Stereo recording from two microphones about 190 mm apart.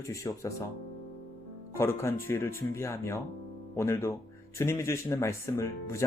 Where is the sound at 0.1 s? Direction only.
15° left (ahead or behind).